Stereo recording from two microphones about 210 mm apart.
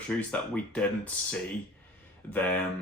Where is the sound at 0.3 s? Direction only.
5° left (ahead or behind).